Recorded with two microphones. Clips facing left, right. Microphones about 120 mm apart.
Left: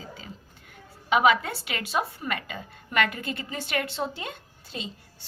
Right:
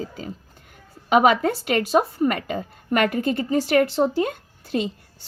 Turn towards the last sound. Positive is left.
turn(degrees=-55)  # may be behind; listen again after turning